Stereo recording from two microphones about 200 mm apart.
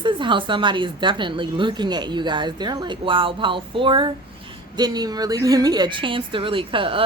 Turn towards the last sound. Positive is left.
turn(degrees=-25)  # may be behind; listen again after turning